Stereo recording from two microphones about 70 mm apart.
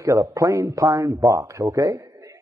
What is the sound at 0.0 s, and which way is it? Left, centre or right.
A man's voice, right.